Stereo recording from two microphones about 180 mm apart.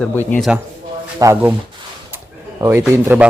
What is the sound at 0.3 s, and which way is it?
Speech, 5° left (ahead or behind).